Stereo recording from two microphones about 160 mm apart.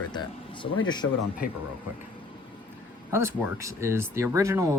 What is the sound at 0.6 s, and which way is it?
Speech, 25° left (ahead or behind).